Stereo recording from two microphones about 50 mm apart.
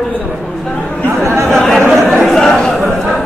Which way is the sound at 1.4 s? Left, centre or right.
Centre.